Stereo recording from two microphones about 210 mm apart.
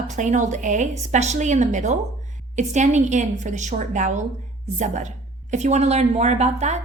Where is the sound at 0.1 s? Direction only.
35° right (ahead or behind).